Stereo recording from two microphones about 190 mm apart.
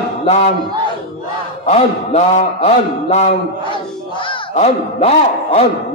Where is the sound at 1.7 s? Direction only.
35° left (ahead or behind).